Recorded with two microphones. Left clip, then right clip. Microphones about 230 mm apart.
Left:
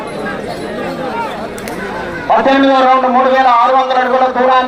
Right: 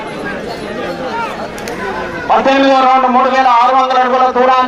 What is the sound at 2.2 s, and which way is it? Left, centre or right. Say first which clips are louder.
A man's voice: even; right.